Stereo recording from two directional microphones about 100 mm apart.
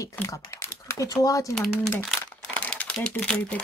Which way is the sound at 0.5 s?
30° left (ahead or behind).